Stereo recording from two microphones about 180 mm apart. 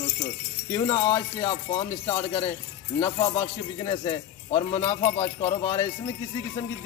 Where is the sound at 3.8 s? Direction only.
30° left (ahead or behind).